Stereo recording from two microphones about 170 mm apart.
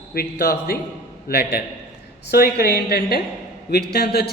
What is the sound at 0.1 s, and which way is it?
A woman's voice, 65° left (ahead or behind).